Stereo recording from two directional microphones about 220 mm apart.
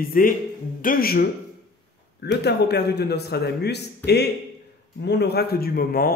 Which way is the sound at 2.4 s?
50° left (ahead or behind).